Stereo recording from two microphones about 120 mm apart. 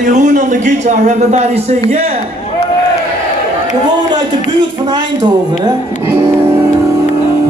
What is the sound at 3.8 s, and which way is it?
A man's voice, 40° right (ahead or behind).